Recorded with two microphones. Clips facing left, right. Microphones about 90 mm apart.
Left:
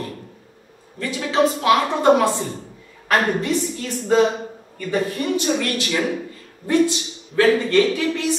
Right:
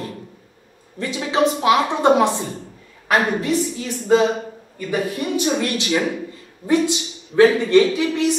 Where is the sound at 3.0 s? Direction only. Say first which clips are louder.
Even; 15° right (ahead or behind).